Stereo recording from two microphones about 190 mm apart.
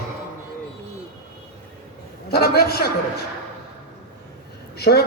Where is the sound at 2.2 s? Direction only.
55° left (ahead or behind).